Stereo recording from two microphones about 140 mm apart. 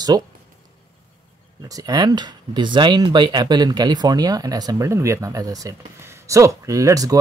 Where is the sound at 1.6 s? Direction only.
25° right (ahead or behind).